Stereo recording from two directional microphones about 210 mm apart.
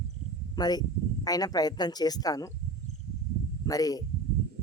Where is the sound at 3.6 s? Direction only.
15° left (ahead or behind).